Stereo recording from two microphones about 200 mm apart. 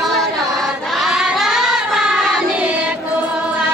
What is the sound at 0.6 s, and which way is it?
Choir, centre (ahead or behind).